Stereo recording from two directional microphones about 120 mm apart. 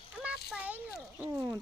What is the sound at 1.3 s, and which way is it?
Speech, 20° right (ahead or behind).